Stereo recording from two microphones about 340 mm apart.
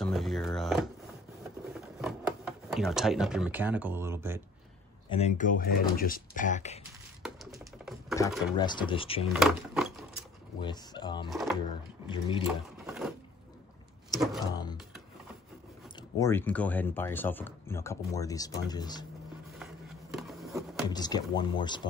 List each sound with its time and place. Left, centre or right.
0.0 s a sound: centre
2.0 s speech: centre
5.1 s speech: left
7.2 s typing: centre
8.5 s speech: centre
9.3 s drawer open or close: centre
10.6 s speech: centre
11.2 s speech: centre
12.1 s speech: centre
12.8 s a sound: centre
14.5 s a sound: centre
16.2 s speech: centre
19.6 s a sound: centre
20.9 s speech: centre